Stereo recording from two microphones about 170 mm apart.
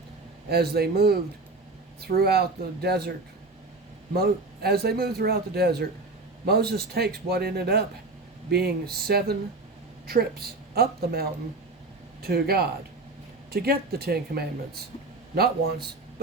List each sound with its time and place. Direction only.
0.5 s a man's voice: 70° right (ahead or behind)
4.1 s a man's voice: 65° right (ahead or behind)